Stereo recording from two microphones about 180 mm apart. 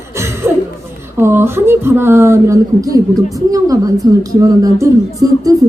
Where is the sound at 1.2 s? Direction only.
15° right (ahead or behind).